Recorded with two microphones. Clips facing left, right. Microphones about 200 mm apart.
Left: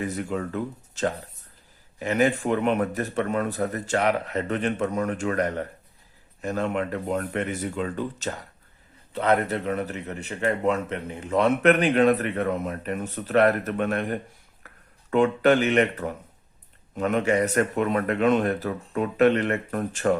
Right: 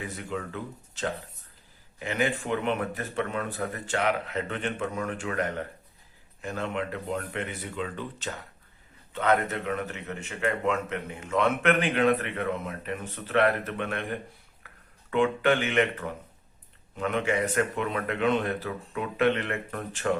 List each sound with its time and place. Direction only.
0.0 s a man's voice: 45° left (ahead or behind)